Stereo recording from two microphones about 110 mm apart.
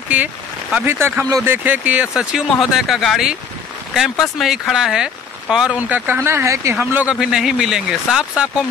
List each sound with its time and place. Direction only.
0.1 s speech: 15° right (ahead or behind)